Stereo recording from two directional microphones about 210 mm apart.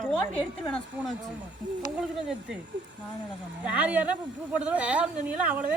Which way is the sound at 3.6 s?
5° right (ahead or behind).